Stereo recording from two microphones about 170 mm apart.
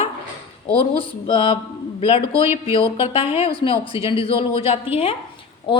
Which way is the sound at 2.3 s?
15° right (ahead or behind).